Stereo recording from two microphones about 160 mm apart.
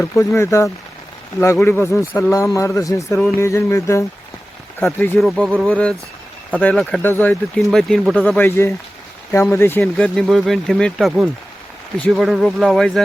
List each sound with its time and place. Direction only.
0.0 s a man's voice: 15° left (ahead or behind)
5.2 s speech: centre (ahead or behind)